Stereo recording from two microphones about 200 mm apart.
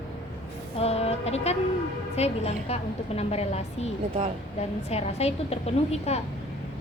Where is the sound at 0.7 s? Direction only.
30° left (ahead or behind).